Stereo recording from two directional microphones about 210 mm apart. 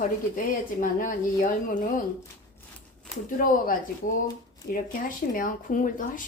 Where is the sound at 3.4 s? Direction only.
40° left (ahead or behind).